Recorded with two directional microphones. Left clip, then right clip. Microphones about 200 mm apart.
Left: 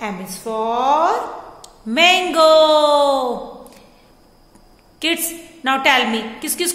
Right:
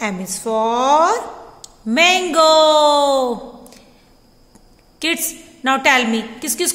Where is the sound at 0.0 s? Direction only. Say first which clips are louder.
Right 3 dB; 35° right (ahead or behind).